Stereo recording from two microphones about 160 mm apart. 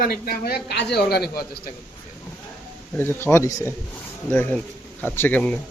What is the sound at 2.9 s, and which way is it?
Speech, 15° left (ahead or behind).